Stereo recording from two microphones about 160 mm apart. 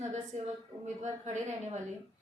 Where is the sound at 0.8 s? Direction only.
50° right (ahead or behind).